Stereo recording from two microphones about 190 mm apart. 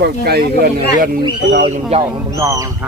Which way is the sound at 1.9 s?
30° right (ahead or behind).